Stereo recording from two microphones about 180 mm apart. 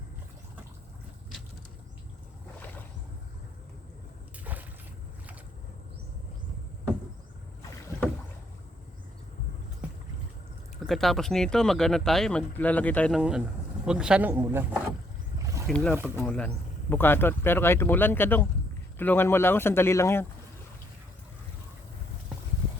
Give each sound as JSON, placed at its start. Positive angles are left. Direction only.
{"t": 4.5, "sound": "a sound", "side_deg": -10}
{"t": 10.8, "sound": "speech", "side_deg": 0}
{"t": 13.1, "sound": "speech", "side_deg": -5}
{"t": 15.6, "sound": "speech", "side_deg": 5}